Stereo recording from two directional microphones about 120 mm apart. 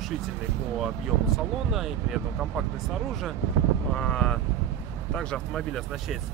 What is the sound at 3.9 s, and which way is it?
Speech, 5° left (ahead or behind).